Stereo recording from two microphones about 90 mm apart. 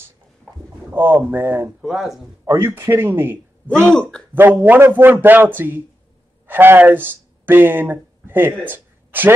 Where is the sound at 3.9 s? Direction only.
10° left (ahead or behind).